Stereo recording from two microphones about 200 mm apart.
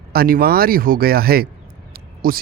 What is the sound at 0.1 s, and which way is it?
A man's voice, 50° right (ahead or behind).